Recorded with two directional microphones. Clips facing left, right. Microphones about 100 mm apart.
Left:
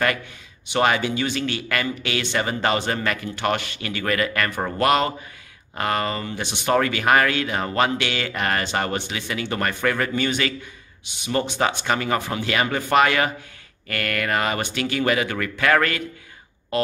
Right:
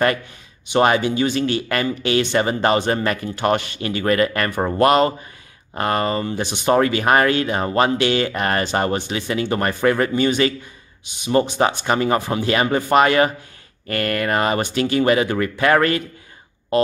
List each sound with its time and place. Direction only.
0.7 s a man's voice: 30° right (ahead or behind)
4.5 s speech: 10° right (ahead or behind)
4.7 s a man's voice: 30° right (ahead or behind)
6.7 s a man's voice: 30° right (ahead or behind)
11.8 s speech: 25° right (ahead or behind)